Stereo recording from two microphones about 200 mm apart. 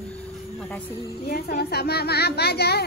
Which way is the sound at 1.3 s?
50° left (ahead or behind).